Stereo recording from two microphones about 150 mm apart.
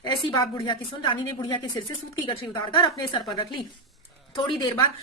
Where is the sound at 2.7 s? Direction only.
30° left (ahead or behind).